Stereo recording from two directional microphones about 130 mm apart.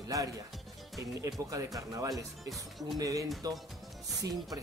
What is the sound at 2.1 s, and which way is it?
Speech, centre (ahead or behind).